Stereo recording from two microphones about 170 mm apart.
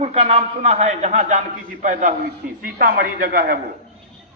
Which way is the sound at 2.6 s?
60° right (ahead or behind).